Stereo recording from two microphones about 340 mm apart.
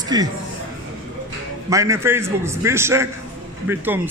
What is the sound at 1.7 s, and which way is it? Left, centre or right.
A man's voice, centre.